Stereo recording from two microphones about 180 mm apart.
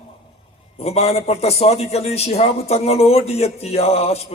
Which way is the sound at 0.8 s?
35° left (ahead or behind).